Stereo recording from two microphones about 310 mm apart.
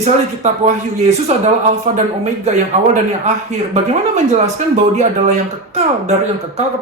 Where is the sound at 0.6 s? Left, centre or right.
Right.